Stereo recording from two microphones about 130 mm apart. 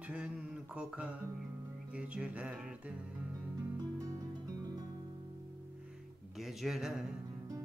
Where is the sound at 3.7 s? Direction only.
30° right (ahead or behind).